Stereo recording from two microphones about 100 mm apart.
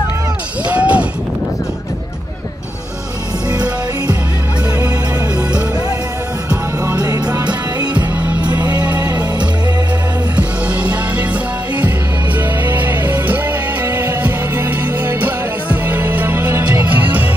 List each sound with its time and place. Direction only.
0.7 s speech: 15° right (ahead or behind)
7.0 s music: 35° right (ahead or behind)
8.7 s music: 45° right (ahead or behind)
10.3 s music: 10° right (ahead or behind)
12.6 s music: 20° right (ahead or behind)